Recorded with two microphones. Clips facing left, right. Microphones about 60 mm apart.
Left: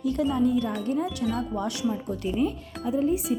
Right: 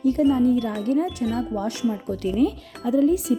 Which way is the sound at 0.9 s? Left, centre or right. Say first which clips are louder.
Right 7 dB; right.